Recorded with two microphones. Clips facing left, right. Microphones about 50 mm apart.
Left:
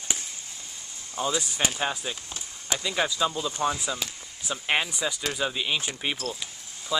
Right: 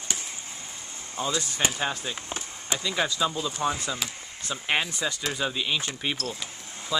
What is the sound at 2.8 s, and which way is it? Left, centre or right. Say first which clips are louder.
Speech: even; centre.